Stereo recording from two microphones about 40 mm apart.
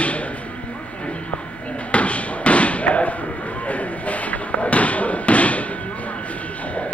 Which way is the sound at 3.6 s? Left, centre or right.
Left.